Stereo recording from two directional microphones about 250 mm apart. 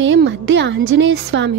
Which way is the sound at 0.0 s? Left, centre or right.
Right.